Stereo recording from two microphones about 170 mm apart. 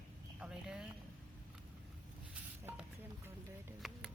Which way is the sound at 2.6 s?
10° right (ahead or behind).